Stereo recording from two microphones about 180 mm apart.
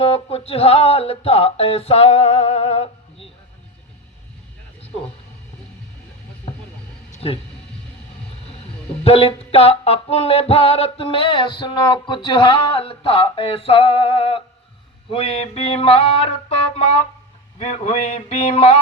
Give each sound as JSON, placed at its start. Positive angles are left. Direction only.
{"t": 0.0, "sound": "music", "side_deg": 35}
{"t": 7.1, "sound": "a sound", "side_deg": 35}
{"t": 9.0, "sound": "music", "side_deg": 35}
{"t": 17.6, "sound": "music", "side_deg": 35}